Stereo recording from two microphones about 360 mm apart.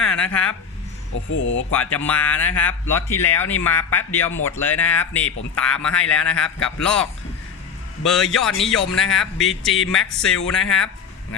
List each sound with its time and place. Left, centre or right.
0.0 s a sound: centre
1.3 s speech: left
1.7 s speech: centre